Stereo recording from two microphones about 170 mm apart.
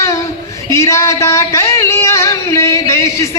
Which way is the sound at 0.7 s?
15° left (ahead or behind).